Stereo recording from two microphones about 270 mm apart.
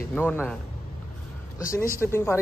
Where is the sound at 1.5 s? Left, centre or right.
Centre.